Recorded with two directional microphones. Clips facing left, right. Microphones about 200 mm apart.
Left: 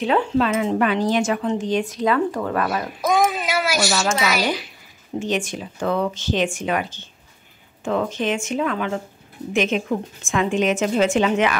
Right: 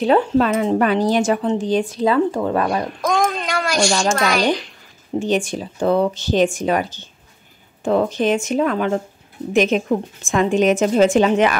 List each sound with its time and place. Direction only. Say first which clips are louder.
0.0 s speech: right 4 dB; 40° right (ahead or behind)
2.9 s a child's voice: even; 5° left (ahead or behind)
5.2 s speech: right 4 dB; 35° right (ahead or behind)